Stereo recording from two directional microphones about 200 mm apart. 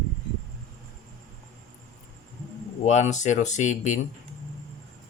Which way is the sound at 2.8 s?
35° left (ahead or behind).